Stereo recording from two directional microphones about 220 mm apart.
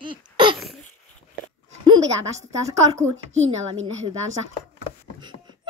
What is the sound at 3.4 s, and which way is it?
Speech, 30° right (ahead or behind).